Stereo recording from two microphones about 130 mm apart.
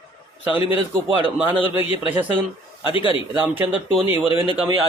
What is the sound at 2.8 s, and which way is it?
Speech, 40° left (ahead or behind).